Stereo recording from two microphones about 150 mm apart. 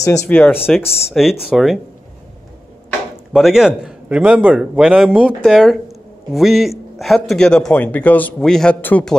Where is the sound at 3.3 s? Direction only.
5° right (ahead or behind).